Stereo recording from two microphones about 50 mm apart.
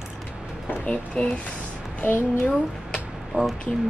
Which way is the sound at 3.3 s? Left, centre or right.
Right.